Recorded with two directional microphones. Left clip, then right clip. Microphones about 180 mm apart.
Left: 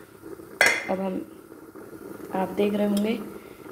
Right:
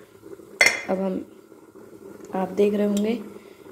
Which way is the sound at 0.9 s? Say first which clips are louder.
Right 2 dB; 30° right (ahead or behind).